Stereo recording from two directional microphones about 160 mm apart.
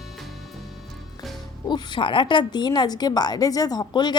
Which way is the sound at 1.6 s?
30° left (ahead or behind).